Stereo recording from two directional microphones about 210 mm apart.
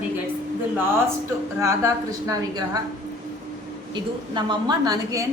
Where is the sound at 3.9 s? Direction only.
20° right (ahead or behind).